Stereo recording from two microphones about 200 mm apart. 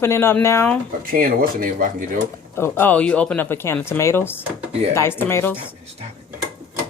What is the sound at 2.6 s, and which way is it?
Speech, 10° left (ahead or behind).